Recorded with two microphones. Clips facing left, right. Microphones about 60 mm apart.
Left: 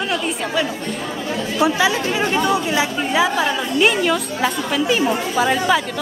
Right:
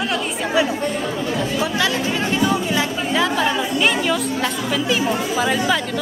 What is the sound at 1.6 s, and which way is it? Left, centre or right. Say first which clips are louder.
A woman's voice: left 7 dB; centre.